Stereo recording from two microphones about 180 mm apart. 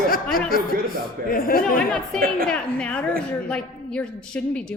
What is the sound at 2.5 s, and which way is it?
A woman's voice, 5° left (ahead or behind).